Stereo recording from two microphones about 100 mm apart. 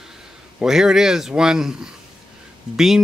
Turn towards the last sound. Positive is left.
turn(degrees=-5)  # may be behind; listen again after turning